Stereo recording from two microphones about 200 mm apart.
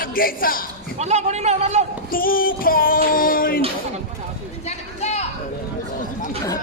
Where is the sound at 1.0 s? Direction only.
35° right (ahead or behind).